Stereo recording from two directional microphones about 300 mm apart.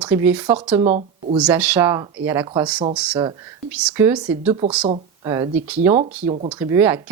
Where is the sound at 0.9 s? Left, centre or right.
Right.